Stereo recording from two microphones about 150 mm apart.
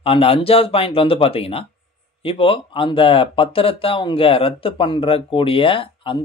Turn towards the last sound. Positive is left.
turn(degrees=35)  # may be behind; listen again after turning